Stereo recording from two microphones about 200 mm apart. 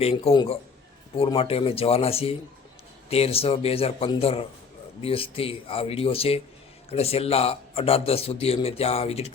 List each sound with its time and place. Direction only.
0.0 s a man's voice: 30° left (ahead or behind)